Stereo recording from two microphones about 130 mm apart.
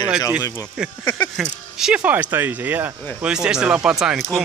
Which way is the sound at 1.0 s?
20° left (ahead or behind).